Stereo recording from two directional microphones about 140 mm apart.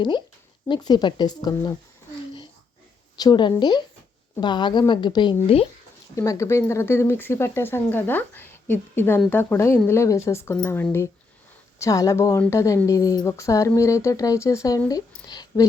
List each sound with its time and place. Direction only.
0.7 s a woman's voice: 30° left (ahead or behind)
3.2 s a woman's voice: 30° left (ahead or behind)
6.1 s speech: 20° left (ahead or behind)
14.8 s a sound: 30° left (ahead or behind)